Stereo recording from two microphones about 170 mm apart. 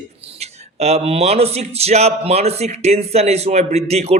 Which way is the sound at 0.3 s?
40° right (ahead or behind).